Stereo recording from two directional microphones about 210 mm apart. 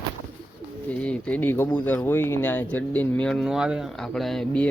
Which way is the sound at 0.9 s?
5° left (ahead or behind).